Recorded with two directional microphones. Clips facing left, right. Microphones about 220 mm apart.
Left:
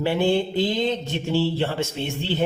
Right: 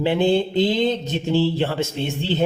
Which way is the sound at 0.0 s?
20° right (ahead or behind).